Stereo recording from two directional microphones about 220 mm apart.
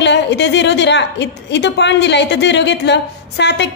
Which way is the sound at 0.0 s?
50° left (ahead or behind).